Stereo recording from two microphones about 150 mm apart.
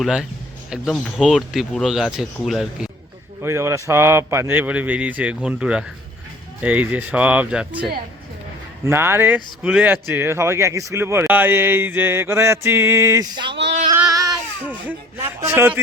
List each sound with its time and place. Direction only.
0.0 s speech: 5° right (ahead or behind)
3.4 s speech: 20° right (ahead or behind)
8.8 s speech: 15° right (ahead or behind)
14.7 s a sound: 10° right (ahead or behind)
15.4 s a man's voice: 15° right (ahead or behind)